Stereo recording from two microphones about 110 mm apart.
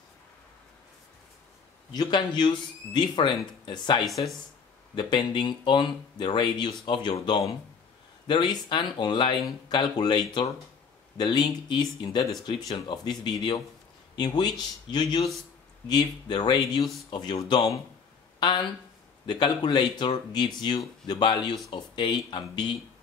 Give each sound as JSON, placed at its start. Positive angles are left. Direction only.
{"t": 2.0, "sound": "speech", "side_deg": 45}
{"t": 18.4, "sound": "speech", "side_deg": 45}